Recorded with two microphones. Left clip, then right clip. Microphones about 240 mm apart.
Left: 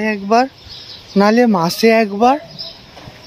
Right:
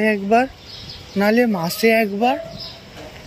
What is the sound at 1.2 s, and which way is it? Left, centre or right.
Speech, centre.